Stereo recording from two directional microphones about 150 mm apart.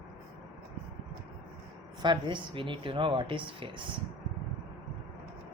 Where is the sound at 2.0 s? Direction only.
30° right (ahead or behind).